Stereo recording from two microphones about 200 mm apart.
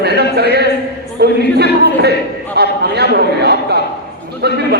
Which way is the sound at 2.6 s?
55° right (ahead or behind).